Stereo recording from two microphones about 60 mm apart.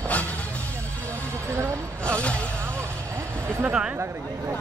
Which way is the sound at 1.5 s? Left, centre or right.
Right.